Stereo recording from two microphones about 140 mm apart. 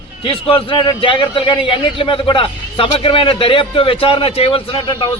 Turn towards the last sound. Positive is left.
turn(degrees=40)  # may be behind; listen again after turning